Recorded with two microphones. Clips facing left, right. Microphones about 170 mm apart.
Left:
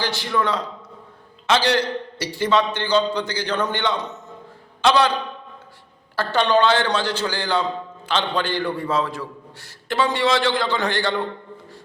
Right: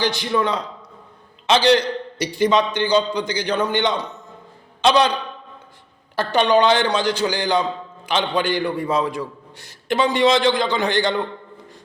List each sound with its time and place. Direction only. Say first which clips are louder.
0.0 s a man's voice: right 2 dB; 20° right (ahead or behind)
6.1 s a man's voice: right 2 dB; 15° right (ahead or behind)